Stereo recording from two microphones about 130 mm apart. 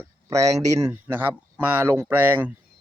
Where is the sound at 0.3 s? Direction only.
25° right (ahead or behind).